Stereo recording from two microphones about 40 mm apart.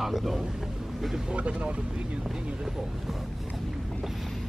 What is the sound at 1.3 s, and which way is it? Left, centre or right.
Speech, right.